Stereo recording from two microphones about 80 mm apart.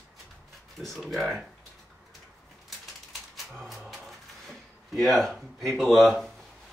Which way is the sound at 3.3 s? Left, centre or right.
Centre.